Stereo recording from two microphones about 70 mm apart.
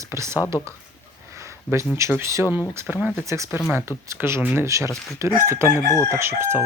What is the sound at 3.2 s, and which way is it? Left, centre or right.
Speech, right.